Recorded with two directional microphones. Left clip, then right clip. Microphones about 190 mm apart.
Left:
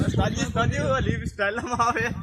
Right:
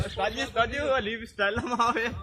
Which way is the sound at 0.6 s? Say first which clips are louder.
Left 1 dB; 55° left (ahead or behind).